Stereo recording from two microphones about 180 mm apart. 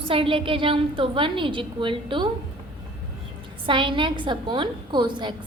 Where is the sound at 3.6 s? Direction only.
25° right (ahead or behind).